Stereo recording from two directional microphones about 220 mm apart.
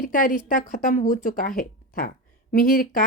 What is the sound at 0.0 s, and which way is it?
A woman's voice, 40° left (ahead or behind).